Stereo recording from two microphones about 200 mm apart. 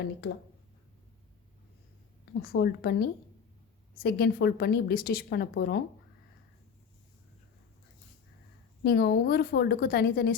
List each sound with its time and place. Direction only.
2.4 s a woman's voice: 50° left (ahead or behind)
8.8 s a woman's voice: 50° left (ahead or behind)